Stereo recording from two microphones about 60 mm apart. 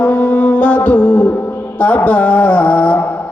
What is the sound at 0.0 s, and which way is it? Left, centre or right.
Music, left.